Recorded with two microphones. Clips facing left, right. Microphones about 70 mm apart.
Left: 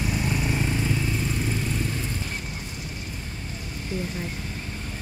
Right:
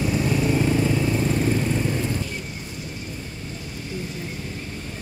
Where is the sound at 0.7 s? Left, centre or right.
Right.